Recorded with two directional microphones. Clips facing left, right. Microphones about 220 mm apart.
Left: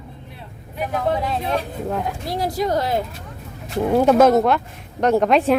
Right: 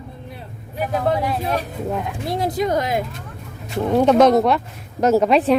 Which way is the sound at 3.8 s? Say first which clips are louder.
Even; 5° left (ahead or behind).